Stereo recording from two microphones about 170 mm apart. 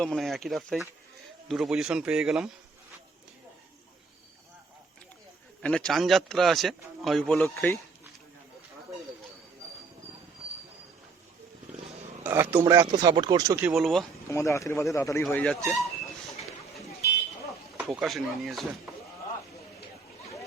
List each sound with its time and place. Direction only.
0.0 s speech: 5° left (ahead or behind)
5.6 s speech: 5° left (ahead or behind)
12.2 s a man's voice: 15° right (ahead or behind)
13.7 s speech: centre (ahead or behind)
14.3 s speech: 15° left (ahead or behind)
17.7 s speech: 5° right (ahead or behind)